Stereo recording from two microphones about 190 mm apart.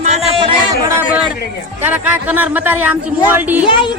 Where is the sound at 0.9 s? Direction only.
10° right (ahead or behind).